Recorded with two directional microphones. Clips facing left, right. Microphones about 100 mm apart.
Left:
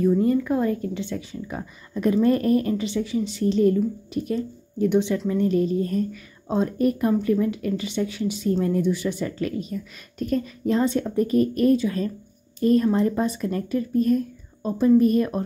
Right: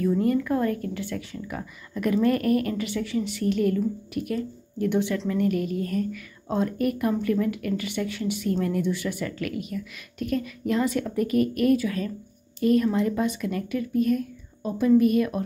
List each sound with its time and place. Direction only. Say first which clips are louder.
0.0 s speech: left 3 dB; 20° left (ahead or behind)